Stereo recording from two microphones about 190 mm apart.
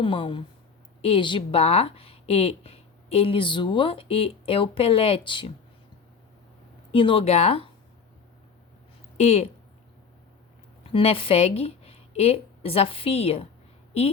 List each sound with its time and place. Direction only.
0.0 s a woman's voice: 25° left (ahead or behind)
6.9 s speech: 30° left (ahead or behind)
9.1 s a woman's voice: 35° left (ahead or behind)
10.8 s speech: 30° left (ahead or behind)